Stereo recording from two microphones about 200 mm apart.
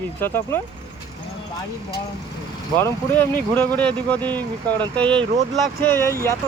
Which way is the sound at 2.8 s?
10° left (ahead or behind).